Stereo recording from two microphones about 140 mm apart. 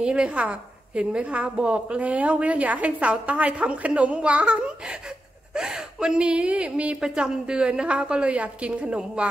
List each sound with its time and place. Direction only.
0.0 s a woman's voice: 10° right (ahead or behind)